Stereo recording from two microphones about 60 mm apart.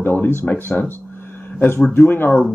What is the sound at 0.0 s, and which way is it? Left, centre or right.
Speech, left.